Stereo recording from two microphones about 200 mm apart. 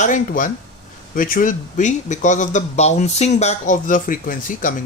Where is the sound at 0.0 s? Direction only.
40° left (ahead or behind).